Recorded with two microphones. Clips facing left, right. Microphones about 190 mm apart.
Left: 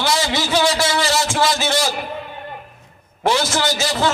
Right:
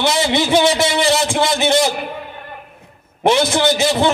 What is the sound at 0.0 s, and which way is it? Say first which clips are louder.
A man's voice: right 4 dB; 20° right (ahead or behind).